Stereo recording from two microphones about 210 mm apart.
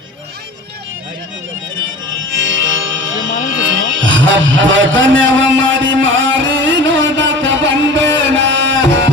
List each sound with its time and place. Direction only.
2.1 s music: 65° right (ahead or behind)